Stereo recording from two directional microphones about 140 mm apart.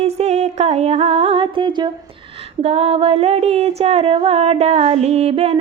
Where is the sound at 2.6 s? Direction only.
45° right (ahead or behind).